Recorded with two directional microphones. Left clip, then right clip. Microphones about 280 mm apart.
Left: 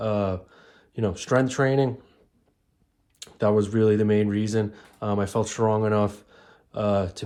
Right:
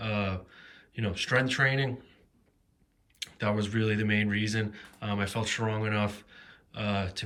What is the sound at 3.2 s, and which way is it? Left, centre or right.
Speech, centre.